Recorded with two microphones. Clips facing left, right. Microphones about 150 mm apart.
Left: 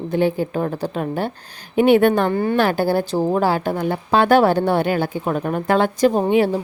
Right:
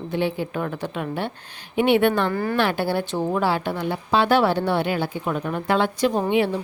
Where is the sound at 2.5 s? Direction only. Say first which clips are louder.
Left 4 dB; 40° left (ahead or behind).